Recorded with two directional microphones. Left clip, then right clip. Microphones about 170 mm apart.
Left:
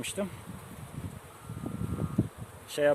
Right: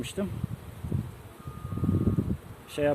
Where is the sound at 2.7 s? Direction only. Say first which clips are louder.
Left 1 dB; 40° left (ahead or behind).